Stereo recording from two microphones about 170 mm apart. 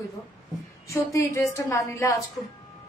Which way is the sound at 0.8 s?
15° left (ahead or behind).